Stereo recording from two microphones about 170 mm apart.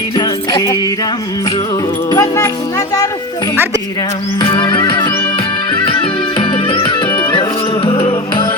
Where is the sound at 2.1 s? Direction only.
15° left (ahead or behind).